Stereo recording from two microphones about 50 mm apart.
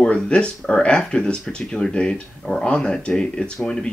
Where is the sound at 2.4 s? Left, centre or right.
Centre.